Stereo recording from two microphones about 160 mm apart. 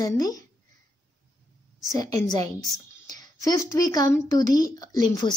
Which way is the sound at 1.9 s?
20° left (ahead or behind).